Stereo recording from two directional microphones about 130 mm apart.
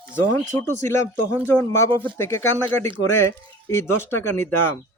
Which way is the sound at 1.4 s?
20° left (ahead or behind).